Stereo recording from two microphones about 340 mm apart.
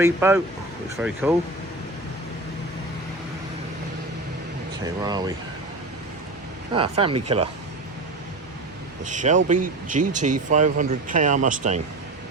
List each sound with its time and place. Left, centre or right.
0.0 s speech: centre
4.9 s speech: centre
6.7 s speech: centre
9.0 s speech: right